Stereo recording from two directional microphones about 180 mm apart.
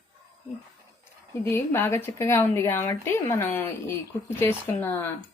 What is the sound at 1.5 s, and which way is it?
Speech, 10° left (ahead or behind).